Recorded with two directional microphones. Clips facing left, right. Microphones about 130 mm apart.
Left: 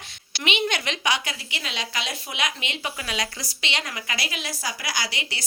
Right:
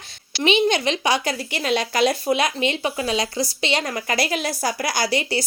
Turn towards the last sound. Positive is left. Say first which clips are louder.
# right 10 dB
turn(degrees=-40)  # may be behind; listen again after turning